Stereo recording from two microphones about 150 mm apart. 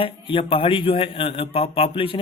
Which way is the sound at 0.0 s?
35° left (ahead or behind).